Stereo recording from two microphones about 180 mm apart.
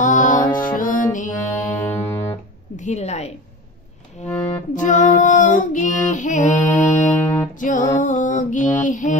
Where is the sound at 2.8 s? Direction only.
40° left (ahead or behind).